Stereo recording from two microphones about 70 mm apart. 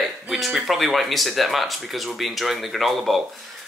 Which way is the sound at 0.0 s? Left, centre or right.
Centre.